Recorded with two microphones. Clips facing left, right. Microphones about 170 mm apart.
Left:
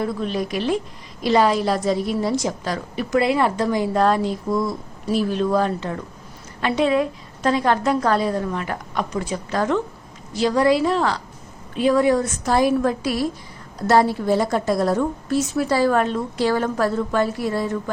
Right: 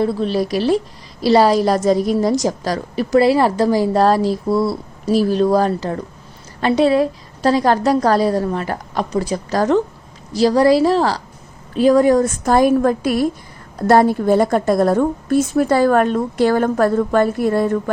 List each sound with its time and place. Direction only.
0.0 s a woman's voice: 30° right (ahead or behind); by 17.9 s 55° right (ahead or behind)